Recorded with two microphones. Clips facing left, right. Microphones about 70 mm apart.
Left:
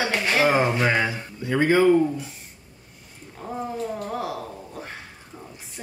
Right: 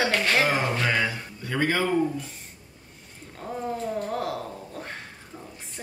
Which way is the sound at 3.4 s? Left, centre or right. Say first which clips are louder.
Left 1 dB; centre.